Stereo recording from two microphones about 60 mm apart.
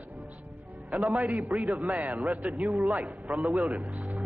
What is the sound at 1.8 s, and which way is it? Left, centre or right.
Speech, right.